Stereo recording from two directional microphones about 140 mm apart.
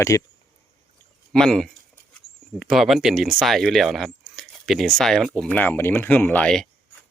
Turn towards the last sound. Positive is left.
turn(degrees=10)  # may be behind; listen again after turning